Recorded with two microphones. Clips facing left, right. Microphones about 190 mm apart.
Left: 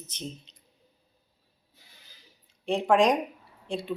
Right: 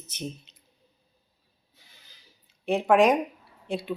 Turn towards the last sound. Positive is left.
turn(degrees=0)  # may be behind; listen again after turning